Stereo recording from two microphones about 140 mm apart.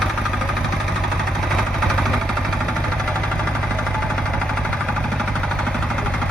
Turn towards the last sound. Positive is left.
turn(degrees=5)  # may be behind; listen again after turning